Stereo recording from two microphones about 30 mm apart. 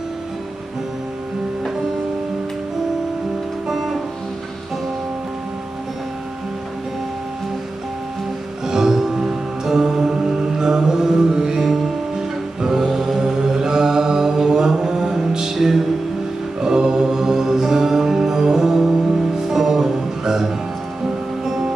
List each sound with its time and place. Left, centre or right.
3.6 s music: centre
8.6 s music: centre
11.6 s music: centre
13.4 s mantra: right
15.5 s music: centre
16.6 s music: right
18.6 s music: centre